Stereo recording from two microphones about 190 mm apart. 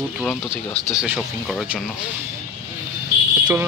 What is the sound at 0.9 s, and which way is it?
Speech, 5° right (ahead or behind).